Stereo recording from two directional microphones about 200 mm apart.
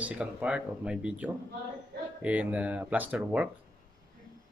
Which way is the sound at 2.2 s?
5° right (ahead or behind).